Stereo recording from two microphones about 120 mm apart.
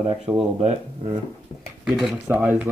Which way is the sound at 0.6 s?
65° right (ahead or behind).